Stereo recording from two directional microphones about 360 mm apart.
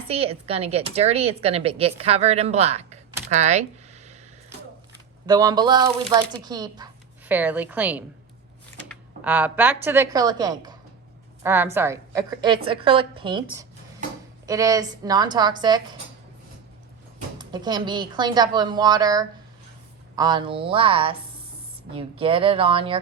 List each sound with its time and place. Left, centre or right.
0.1 s speech: centre
5.2 s a woman's voice: centre
17.2 s speech: centre